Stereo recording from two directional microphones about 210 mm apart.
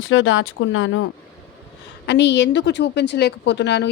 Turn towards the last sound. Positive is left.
turn(degrees=55)  # may be behind; listen again after turning